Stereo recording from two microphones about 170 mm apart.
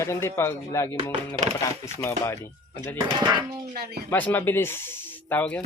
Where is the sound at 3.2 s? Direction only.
25° right (ahead or behind).